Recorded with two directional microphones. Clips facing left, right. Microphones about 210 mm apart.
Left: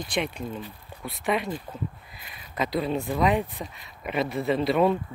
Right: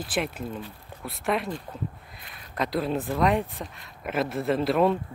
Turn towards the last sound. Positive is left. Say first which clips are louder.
# even
turn(degrees=0)  # may be behind; listen again after turning